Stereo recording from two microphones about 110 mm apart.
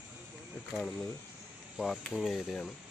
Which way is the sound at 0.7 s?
Centre (ahead or behind).